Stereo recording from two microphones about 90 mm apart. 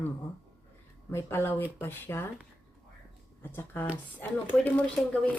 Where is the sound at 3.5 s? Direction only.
25° left (ahead or behind).